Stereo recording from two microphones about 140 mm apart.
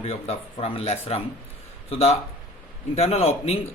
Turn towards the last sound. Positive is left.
turn(degrees=45)  # may be behind; listen again after turning